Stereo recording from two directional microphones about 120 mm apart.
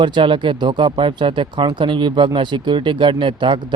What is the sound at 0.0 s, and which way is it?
Speech, 40° right (ahead or behind).